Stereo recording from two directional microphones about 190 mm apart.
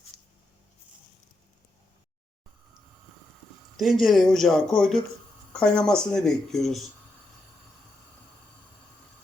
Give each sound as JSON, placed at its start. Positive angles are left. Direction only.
{"t": 0.1, "sound": "writing", "side_deg": 20}
{"t": 3.8, "sound": "speech", "side_deg": 0}